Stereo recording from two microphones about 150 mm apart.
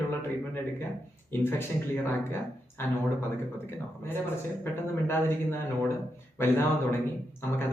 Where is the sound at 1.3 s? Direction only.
15° left (ahead or behind).